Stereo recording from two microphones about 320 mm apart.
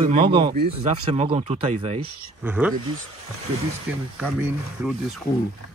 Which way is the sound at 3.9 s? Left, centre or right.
Centre.